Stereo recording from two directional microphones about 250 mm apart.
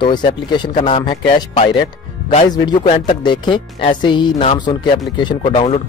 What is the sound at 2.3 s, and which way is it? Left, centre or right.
Speech, left.